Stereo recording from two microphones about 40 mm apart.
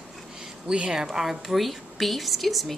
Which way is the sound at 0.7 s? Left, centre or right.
Centre.